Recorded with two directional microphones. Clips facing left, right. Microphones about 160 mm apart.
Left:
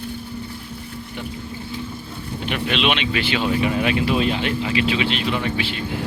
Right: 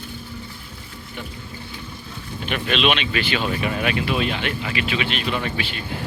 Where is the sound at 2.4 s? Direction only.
20° left (ahead or behind).